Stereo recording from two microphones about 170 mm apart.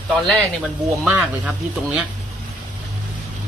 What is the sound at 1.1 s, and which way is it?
Speech, 10° right (ahead or behind).